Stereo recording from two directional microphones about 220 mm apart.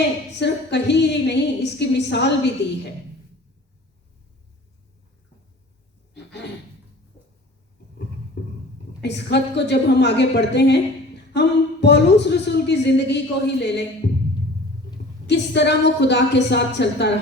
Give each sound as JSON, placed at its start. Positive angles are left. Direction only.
{"t": 0.3, "sound": "speech", "side_deg": 50}
{"t": 8.4, "sound": "a sound", "side_deg": 50}
{"t": 9.0, "sound": "speech", "side_deg": 50}
{"t": 15.3, "sound": "speech", "side_deg": 50}